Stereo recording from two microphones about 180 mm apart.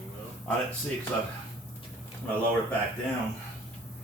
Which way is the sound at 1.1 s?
5° left (ahead or behind).